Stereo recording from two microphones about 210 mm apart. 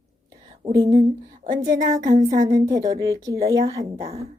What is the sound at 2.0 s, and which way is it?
Speech, 35° right (ahead or behind).